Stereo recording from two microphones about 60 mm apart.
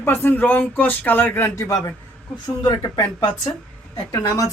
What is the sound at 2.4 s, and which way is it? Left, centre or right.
Speech, left.